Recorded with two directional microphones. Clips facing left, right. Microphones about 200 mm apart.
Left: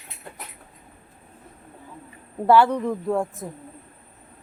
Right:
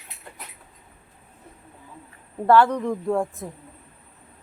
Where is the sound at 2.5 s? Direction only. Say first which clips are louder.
Even; 5° left (ahead or behind).